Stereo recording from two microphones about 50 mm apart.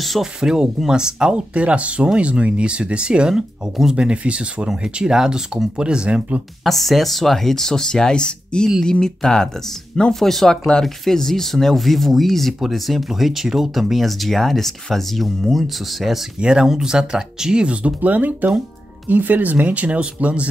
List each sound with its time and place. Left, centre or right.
0.2 s speech: centre
3.9 s speech: right
6.6 s speech: centre
16.3 s speech: centre